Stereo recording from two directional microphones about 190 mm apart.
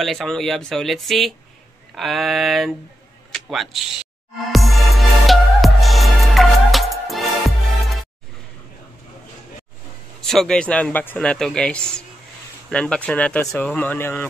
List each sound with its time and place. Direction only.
0.0 s speech: centre (ahead or behind)
3.3 s music: centre (ahead or behind)
10.2 s speech: 5° left (ahead or behind)